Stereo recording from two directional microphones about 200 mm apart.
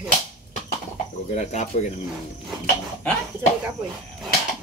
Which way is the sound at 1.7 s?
35° left (ahead or behind).